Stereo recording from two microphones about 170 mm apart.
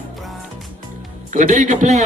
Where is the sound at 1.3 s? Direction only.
45° right (ahead or behind).